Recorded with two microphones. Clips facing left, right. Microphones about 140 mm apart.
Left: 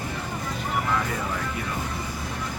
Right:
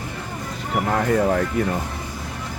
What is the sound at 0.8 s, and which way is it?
Speech, 50° right (ahead or behind).